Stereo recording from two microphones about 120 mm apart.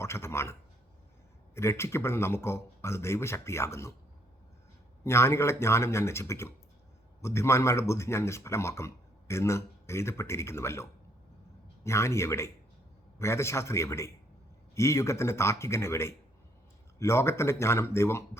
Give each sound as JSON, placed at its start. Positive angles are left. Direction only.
{"t": 0.0, "sound": "speech", "side_deg": 20}
{"t": 1.5, "sound": "speech", "side_deg": 20}
{"t": 5.0, "sound": "speech", "side_deg": 20}